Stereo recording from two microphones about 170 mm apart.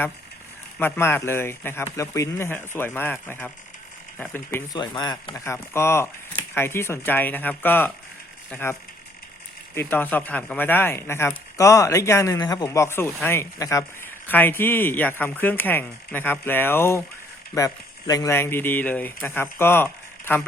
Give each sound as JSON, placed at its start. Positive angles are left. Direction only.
{"t": 0.8, "sound": "speech", "side_deg": 15}
{"t": 4.8, "sound": "speech", "side_deg": 25}
{"t": 9.7, "sound": "speech", "side_deg": 10}